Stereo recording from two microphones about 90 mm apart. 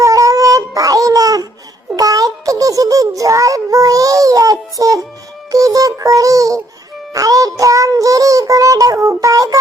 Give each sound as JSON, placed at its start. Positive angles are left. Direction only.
{"t": 0.0, "sound": "baby cry", "side_deg": -40}
{"t": 2.0, "sound": "a sound", "side_deg": -40}
{"t": 4.8, "sound": "music", "side_deg": -40}
{"t": 7.1, "sound": "child singing", "side_deg": -40}